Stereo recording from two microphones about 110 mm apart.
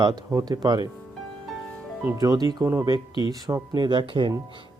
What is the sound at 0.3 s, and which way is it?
Speech, 35° right (ahead or behind).